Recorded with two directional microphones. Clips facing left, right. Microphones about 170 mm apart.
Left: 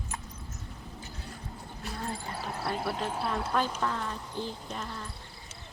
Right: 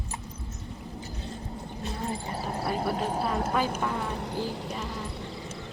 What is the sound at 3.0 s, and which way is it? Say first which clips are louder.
Speech: right 4 dB; 40° right (ahead or behind).